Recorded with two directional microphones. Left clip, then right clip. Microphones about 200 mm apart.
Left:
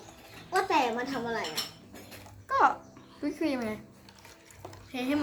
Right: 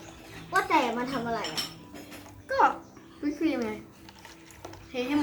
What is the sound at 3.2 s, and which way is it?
Speech, 40° left (ahead or behind).